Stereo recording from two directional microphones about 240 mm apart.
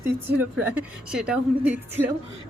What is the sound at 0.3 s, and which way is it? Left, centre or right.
Speech, centre.